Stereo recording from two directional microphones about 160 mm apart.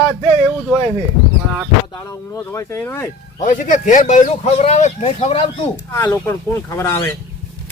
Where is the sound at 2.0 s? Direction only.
15° left (ahead or behind).